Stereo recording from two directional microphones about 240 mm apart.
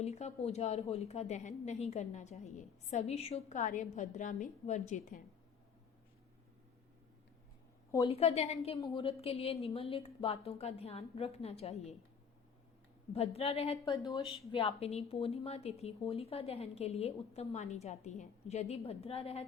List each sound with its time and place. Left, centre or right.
0.0 s a woman's voice: left
7.9 s a woman's voice: left
13.1 s a woman's voice: left